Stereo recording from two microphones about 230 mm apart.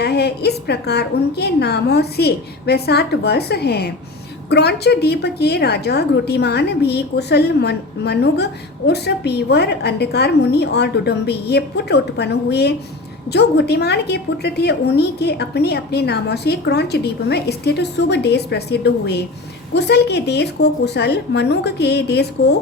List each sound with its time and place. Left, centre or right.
0.0 s a woman's voice: left